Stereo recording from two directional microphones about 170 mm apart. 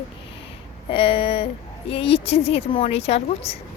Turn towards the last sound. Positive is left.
turn(degrees=35)  # may be behind; listen again after turning